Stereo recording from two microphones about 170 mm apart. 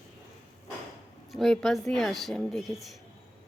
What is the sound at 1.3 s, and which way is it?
A woman's voice, centre (ahead or behind).